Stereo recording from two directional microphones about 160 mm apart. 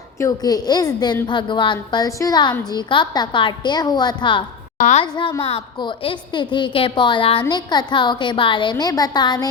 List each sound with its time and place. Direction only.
0.2 s a woman's voice: 25° left (ahead or behind)
4.8 s a woman's voice: 45° left (ahead or behind)
5.0 s a woman's voice: 25° left (ahead or behind)